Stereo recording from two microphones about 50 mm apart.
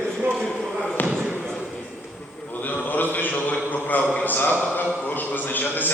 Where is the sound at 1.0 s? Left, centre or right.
Left.